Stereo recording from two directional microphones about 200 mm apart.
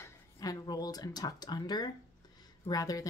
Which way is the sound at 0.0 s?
20° left (ahead or behind).